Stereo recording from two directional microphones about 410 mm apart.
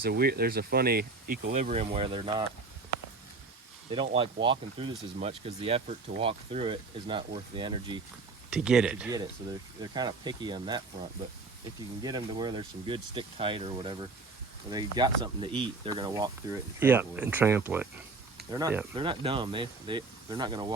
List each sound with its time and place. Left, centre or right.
0.0 s speech: right
3.8 s speech: centre
12.0 s speech: centre